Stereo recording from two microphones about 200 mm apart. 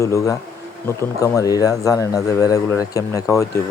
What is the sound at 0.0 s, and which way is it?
Speech, 15° left (ahead or behind).